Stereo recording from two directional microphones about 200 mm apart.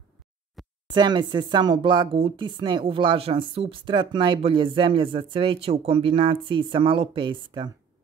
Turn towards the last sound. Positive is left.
turn(degrees=-25)  # may be behind; listen again after turning